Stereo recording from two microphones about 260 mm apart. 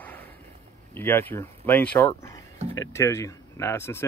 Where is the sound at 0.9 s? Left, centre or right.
Centre.